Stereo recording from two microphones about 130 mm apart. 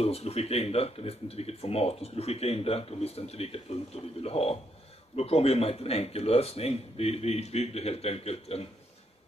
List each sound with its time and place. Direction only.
0.0 s speech: 50° left (ahead or behind)